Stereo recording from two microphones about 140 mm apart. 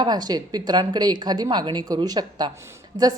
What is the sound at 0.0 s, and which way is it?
A woman's voice, 30° right (ahead or behind).